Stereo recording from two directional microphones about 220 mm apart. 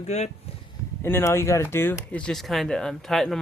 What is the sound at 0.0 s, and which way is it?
Speech, 30° left (ahead or behind).